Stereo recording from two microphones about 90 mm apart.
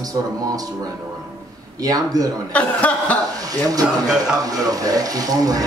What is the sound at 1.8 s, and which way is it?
Speech, 45° right (ahead or behind).